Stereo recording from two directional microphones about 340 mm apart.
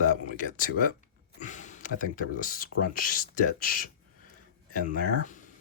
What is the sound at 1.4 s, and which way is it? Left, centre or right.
Speech, left.